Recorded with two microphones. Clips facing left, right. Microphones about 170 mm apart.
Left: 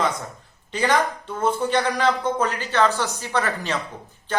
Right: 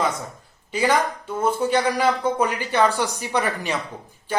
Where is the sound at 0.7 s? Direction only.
10° right (ahead or behind).